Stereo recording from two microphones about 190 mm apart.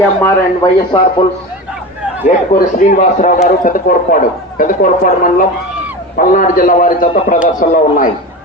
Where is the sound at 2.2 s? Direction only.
40° left (ahead or behind).